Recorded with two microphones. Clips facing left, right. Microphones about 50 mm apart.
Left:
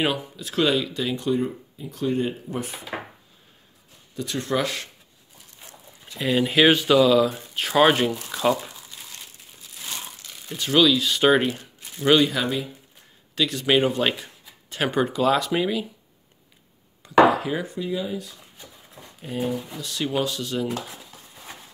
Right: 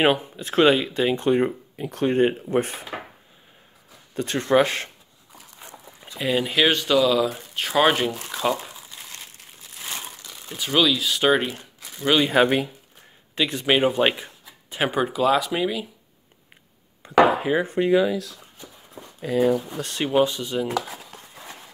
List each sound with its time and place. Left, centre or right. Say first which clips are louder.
0.0 s speech: right 5 dB; right
1.3 s speech: right 4 dB; right
4.1 s speech: right 6 dB; right
6.1 s speech: left 2 dB; centre
9.8 s crumpling: right 1 dB; right
10.5 s speech: left 2 dB; centre
12.4 s speech: right 8 dB; right
13.3 s speech: even; right; by 15.9 s centre
17.0 s chopping: left 1 dB; right
17.7 s speech: right 9 dB; right
19.8 s speech: right 2 dB; right
20.1 s speech: right 6 dB; centre